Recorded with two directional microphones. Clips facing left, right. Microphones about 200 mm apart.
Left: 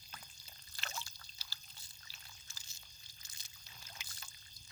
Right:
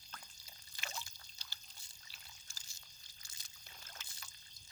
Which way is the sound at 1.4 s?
5° left (ahead or behind).